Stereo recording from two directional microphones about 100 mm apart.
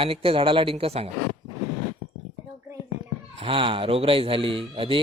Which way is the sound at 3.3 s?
70° right (ahead or behind).